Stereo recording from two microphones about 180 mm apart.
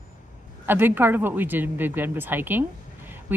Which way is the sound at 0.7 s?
10° right (ahead or behind).